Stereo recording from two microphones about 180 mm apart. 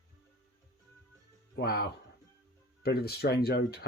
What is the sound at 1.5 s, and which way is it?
Speech, 60° left (ahead or behind).